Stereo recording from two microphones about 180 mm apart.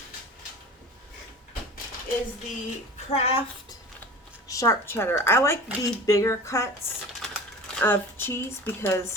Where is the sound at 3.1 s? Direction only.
35° left (ahead or behind).